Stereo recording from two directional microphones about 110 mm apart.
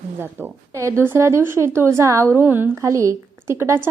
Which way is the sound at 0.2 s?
20° right (ahead or behind).